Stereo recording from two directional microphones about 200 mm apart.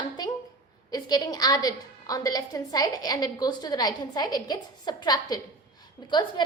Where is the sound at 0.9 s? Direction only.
20° left (ahead or behind).